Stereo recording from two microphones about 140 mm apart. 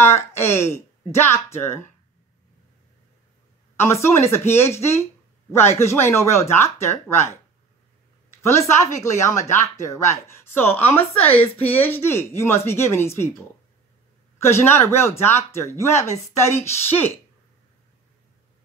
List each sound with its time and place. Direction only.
0.3 s speech: 20° left (ahead or behind)
3.7 s speech: 20° left (ahead or behind)
8.4 s speech: 20° left (ahead or behind)
14.4 s speech: 15° left (ahead or behind)